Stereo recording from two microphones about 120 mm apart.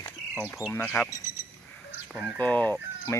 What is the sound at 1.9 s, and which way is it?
Chicken, 15° right (ahead or behind).